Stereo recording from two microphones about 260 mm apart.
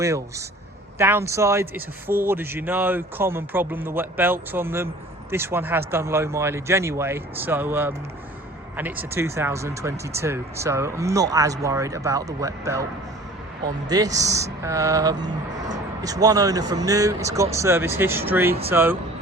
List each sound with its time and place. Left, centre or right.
0.0 s speech: centre
13.8 s speech: centre